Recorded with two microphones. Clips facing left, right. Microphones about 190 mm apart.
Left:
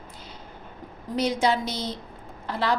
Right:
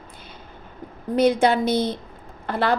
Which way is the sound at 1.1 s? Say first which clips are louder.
Right 6 dB; 55° right (ahead or behind).